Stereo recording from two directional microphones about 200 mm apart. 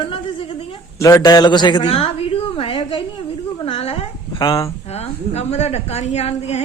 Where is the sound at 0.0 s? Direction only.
25° left (ahead or behind).